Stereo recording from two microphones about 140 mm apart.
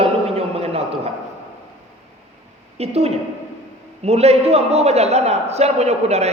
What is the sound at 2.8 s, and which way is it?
A man's voice, 50° right (ahead or behind).